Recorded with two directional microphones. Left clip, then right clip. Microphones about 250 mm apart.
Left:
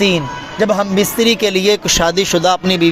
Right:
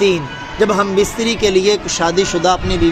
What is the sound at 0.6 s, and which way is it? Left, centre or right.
Speech, left.